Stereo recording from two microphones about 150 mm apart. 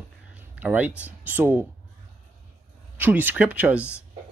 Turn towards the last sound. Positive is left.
turn(degrees=-10)  # may be behind; listen again after turning